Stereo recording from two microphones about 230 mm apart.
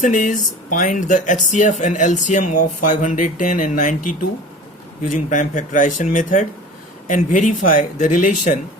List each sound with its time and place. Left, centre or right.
0.0 s speech: left
5.0 s speech: left